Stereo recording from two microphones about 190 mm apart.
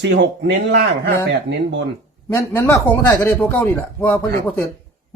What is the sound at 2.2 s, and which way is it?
Speech, 15° left (ahead or behind).